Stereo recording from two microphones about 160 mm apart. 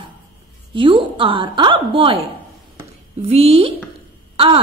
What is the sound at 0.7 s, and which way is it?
A woman's voice, 30° right (ahead or behind).